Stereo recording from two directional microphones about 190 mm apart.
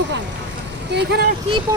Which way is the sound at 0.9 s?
65° right (ahead or behind).